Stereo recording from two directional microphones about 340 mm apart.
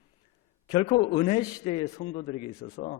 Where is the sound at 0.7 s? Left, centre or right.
Left.